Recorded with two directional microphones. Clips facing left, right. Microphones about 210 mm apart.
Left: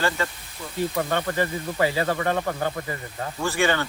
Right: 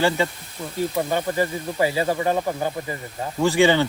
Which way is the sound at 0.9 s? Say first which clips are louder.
Right 3 dB; 15° right (ahead or behind).